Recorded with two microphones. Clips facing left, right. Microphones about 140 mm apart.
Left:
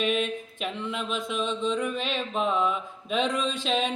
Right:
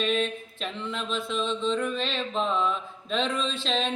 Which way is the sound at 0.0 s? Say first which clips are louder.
Even; 15° left (ahead or behind).